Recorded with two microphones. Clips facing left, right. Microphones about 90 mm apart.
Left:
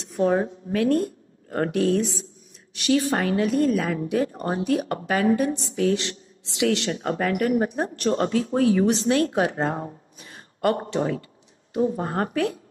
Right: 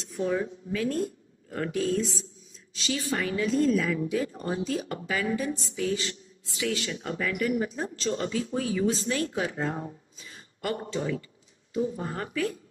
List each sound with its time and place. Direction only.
0.0 s speech: 60° left (ahead or behind)
7.0 s speech: 55° left (ahead or behind)